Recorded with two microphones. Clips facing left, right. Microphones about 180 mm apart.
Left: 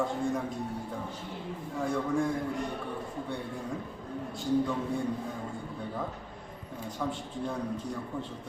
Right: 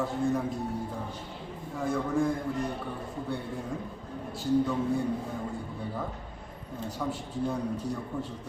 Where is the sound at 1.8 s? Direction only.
Centre (ahead or behind).